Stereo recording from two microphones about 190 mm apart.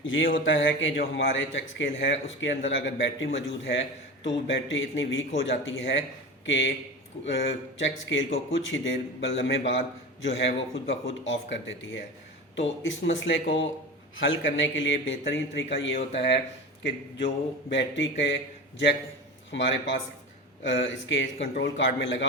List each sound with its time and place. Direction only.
0.0 s speech: 90° left
0.3 s a man's voice: 80° left
19.5 s a man's voice: 75° left (ahead or behind)